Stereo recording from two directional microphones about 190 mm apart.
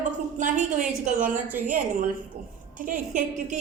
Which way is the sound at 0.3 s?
40° right (ahead or behind).